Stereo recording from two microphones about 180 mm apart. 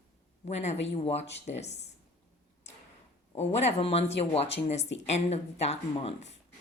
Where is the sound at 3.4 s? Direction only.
40° left (ahead or behind).